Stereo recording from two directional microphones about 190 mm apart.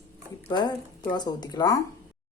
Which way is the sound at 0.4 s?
20° left (ahead or behind).